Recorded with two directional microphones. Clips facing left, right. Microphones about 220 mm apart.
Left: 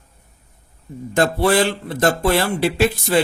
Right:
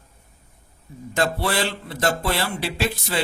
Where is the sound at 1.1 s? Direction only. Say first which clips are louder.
Left 7 dB; 50° left (ahead or behind).